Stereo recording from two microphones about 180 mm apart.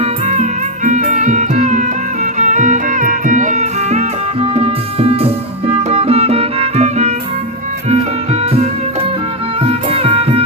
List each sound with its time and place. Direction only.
0.0 s music: 35° right (ahead or behind)